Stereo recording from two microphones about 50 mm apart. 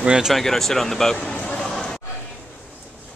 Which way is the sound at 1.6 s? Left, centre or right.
Centre.